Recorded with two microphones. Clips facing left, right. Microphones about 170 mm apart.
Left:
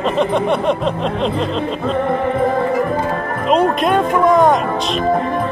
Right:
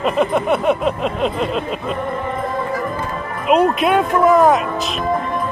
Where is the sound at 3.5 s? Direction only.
5° right (ahead or behind).